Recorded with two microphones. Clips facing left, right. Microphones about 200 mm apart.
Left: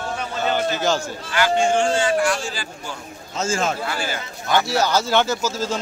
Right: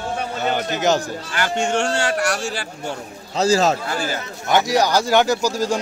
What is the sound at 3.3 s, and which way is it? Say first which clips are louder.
Speech: right 6 dB; 35° right (ahead or behind).